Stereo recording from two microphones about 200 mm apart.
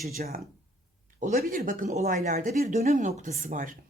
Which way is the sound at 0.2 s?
45° right (ahead or behind).